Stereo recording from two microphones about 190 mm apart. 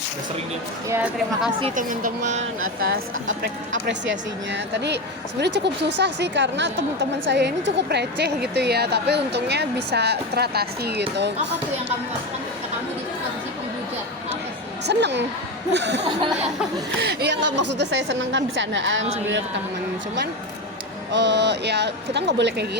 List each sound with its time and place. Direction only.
0.9 s a woman's voice: 10° right (ahead or behind)
1.7 s a woman's voice: 45° right (ahead or behind)
3.7 s a woman's voice: 70° right (ahead or behind)
14.8 s a woman's voice: 65° right (ahead or behind)
17.0 s a woman's voice: 60° right (ahead or behind); by 19.0 s 80° right
21.1 s a woman's voice: 65° right (ahead or behind)